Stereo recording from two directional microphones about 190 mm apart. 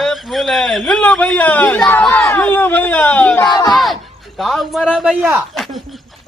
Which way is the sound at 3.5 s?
20° left (ahead or behind).